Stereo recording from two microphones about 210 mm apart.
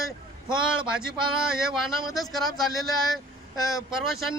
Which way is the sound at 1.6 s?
Centre (ahead or behind).